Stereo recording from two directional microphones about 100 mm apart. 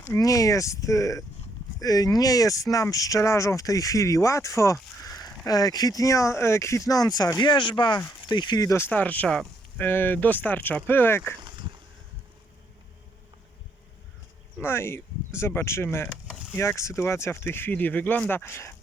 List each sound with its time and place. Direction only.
0.0 s speech: 35° left (ahead or behind); by 8.6 s 50° left (ahead or behind)
8.6 s speech: 25° left (ahead or behind)
8.9 s speech: 15° left (ahead or behind)
9.8 s speech: 20° left (ahead or behind)
11.3 s walk: 50° right (ahead or behind)
14.6 s speech: 25° left (ahead or behind)
16.3 s a sound: 10° right (ahead or behind)
16.6 s speech: 30° left (ahead or behind)